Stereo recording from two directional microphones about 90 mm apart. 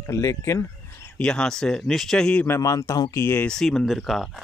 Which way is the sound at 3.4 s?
5° left (ahead or behind).